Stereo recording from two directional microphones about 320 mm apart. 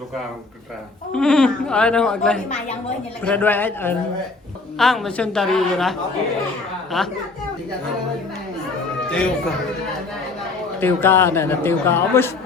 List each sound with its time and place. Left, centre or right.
1.1 s speech: centre
9.0 s speech: centre
10.8 s a man's voice: centre